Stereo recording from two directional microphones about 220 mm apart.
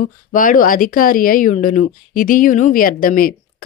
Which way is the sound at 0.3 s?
40° left (ahead or behind).